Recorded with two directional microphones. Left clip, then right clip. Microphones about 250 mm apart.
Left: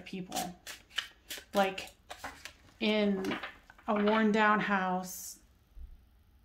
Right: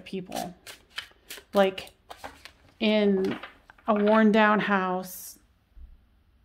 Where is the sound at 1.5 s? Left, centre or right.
Right.